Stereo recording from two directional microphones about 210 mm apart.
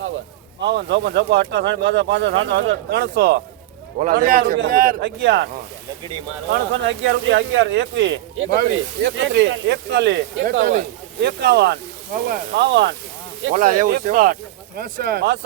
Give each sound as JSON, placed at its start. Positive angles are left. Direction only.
{"t": 0.6, "sound": "speech", "side_deg": -55}
{"t": 4.0, "sound": "a man's voice", "side_deg": -40}
{"t": 5.0, "sound": "speech", "side_deg": -55}
{"t": 6.5, "sound": "speech", "side_deg": -60}
{"t": 8.4, "sound": "speech", "side_deg": -40}
{"t": 9.0, "sound": "speech", "side_deg": -60}
{"t": 10.6, "sound": "speech", "side_deg": -35}
{"t": 11.2, "sound": "a man's voice", "side_deg": -55}
{"t": 13.5, "sound": "a man's voice", "side_deg": -40}